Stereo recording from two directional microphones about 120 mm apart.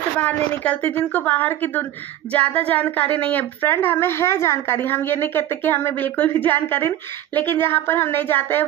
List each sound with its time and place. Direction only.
0.2 s a woman's voice: 10° left (ahead or behind)